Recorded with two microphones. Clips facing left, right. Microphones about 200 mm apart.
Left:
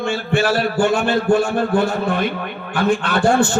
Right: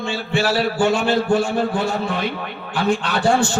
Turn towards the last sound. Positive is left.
turn(degrees=55)  # may be behind; listen again after turning